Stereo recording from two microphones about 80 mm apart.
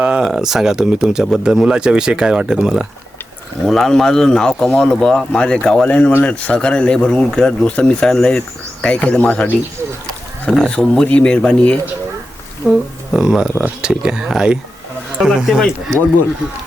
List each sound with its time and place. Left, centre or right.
0.0 s speech: centre
3.7 s speech: centre
10.5 s speech: centre
12.6 s speech: centre